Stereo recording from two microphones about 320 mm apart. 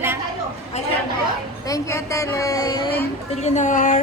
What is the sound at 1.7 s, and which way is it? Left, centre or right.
A woman's voice, centre.